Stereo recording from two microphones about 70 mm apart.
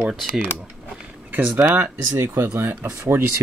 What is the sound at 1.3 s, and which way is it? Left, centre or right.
Speech, right.